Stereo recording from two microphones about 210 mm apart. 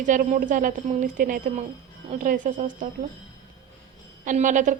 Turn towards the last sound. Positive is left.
turn(degrees=-35)  # may be behind; listen again after turning